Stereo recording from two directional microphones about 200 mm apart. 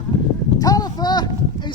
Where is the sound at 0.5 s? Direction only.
20° left (ahead or behind).